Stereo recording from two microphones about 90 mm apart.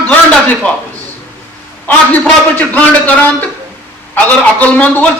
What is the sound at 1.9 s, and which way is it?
A man's voice, 20° left (ahead or behind).